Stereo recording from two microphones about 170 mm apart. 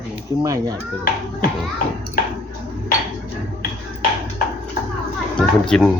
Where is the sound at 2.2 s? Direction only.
60° left (ahead or behind).